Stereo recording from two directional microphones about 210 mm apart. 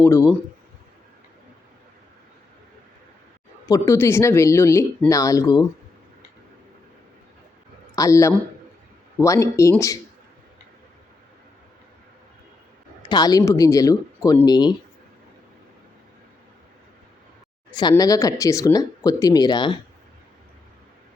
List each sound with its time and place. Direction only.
0.0 s speech: 15° left (ahead or behind)
3.7 s speech: 15° left (ahead or behind)
7.9 s speech: 15° left (ahead or behind)
13.1 s speech: 20° left (ahead or behind)
17.7 s speech: 20° left (ahead or behind)